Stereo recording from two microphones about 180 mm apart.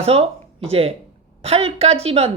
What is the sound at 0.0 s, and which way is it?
Speech, 35° right (ahead or behind).